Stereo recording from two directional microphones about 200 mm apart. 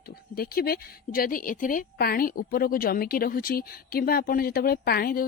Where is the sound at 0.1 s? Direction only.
50° left (ahead or behind).